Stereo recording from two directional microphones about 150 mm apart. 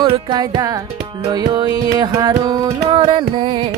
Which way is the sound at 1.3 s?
25° right (ahead or behind).